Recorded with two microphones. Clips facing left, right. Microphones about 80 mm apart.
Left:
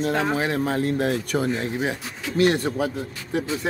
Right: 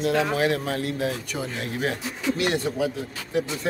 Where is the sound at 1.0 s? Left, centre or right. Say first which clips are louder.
Left 5 dB; left.